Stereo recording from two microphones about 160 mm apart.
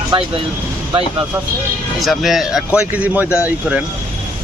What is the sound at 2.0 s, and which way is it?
A man's voice, centre (ahead or behind).